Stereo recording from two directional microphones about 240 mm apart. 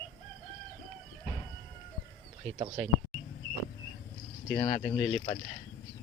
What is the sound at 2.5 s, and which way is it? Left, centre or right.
Speech, right.